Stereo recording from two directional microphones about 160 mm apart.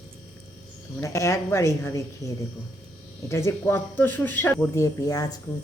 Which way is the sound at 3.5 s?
15° left (ahead or behind).